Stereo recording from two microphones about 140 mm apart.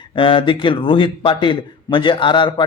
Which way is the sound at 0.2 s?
35° left (ahead or behind).